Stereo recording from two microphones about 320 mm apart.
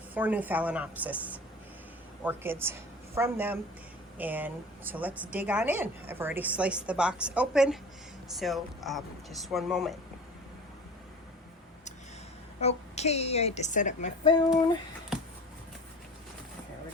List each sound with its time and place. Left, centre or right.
0.1 s a woman's voice: centre
12.5 s a woman's voice: centre